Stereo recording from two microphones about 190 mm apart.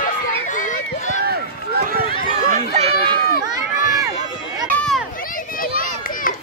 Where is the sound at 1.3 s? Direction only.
55° right (ahead or behind).